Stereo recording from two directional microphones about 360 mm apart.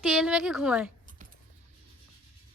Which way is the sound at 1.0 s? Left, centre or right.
Right.